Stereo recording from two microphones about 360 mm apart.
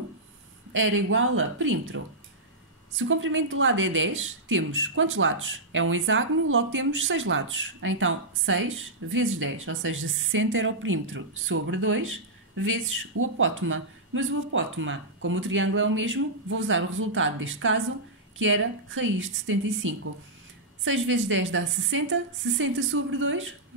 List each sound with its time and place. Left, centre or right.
0.7 s speech: right
3.0 s speech: right